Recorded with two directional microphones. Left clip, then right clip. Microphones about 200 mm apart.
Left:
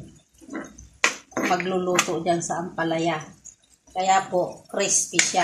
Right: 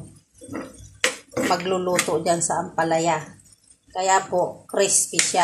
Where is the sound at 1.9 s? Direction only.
25° right (ahead or behind).